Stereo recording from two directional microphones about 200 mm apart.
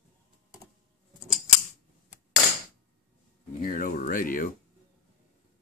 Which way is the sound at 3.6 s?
45° left (ahead or behind).